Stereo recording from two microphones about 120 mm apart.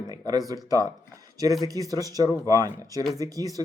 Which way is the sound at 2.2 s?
25° left (ahead or behind).